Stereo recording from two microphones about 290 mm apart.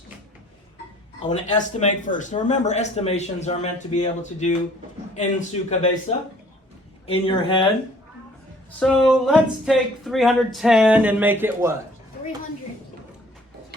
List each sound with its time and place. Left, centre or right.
1.3 s speech: left
8.8 s speech: centre